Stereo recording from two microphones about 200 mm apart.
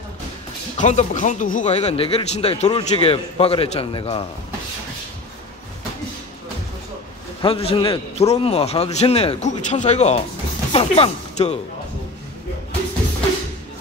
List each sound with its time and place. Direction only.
0.7 s speech: 40° left (ahead or behind)
7.4 s speech: 30° left (ahead or behind)